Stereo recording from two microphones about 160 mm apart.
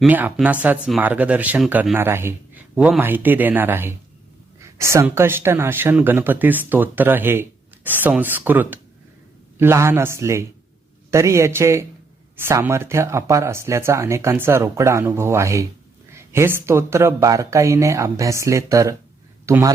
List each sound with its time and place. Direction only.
0.1 s speech: 10° right (ahead or behind)